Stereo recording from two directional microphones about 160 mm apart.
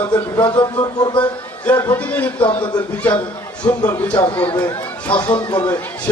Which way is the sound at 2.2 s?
10° left (ahead or behind).